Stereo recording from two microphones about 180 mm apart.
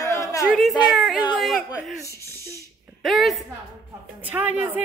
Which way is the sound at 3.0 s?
Centre (ahead or behind).